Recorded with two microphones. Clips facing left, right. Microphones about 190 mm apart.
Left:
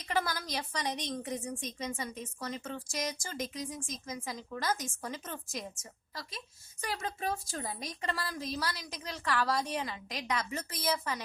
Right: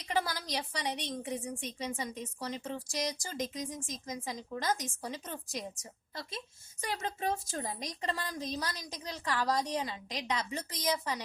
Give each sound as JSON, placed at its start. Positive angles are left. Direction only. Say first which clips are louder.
{"t": 0.0, "sound": "a woman's voice", "louder": "even", "side_deg": -15}
{"t": 6.8, "sound": "a woman's voice", "louder": "right 1 dB", "side_deg": -20}